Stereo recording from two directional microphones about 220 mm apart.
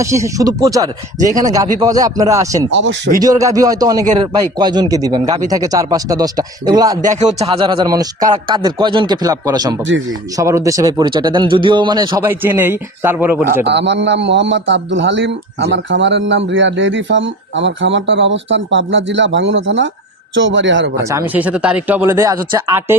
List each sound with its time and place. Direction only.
0.0 s a man's voice: 15° right (ahead or behind)
2.6 s a man's voice: 50° right (ahead or behind)
3.2 s a man's voice: 15° right (ahead or behind)
7.0 s a man's voice: 35° right (ahead or behind); by 13.5 s 10° right (ahead or behind)
13.7 s a man's voice: 50° right (ahead or behind)
20.9 s a man's voice: 15° right (ahead or behind)